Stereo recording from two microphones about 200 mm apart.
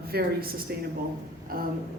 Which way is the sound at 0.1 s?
50° right (ahead or behind).